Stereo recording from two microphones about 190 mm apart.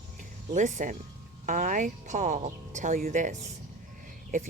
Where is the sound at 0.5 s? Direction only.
40° right (ahead or behind).